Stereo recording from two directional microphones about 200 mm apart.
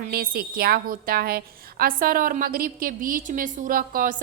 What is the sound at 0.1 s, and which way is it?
A woman's voice, 50° right (ahead or behind).